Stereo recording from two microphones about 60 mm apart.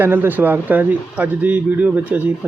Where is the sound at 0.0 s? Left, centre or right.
Right.